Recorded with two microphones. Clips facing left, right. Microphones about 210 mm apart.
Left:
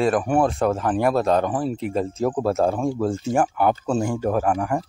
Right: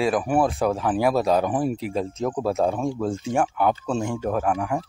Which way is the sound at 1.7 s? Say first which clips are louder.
Left 2 dB; centre (ahead or behind).